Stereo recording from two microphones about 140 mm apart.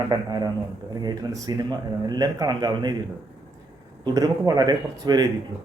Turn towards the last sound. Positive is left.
turn(degrees=-25)  # may be behind; listen again after turning